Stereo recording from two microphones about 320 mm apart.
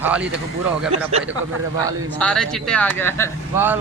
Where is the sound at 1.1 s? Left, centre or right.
Centre.